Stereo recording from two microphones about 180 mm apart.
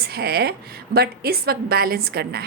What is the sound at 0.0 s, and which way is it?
A woman's voice, 60° right (ahead or behind).